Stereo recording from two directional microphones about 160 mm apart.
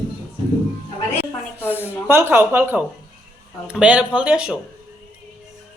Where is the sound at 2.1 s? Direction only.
15° right (ahead or behind).